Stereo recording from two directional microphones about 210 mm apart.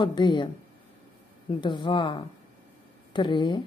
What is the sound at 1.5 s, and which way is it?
Speech, 20° left (ahead or behind).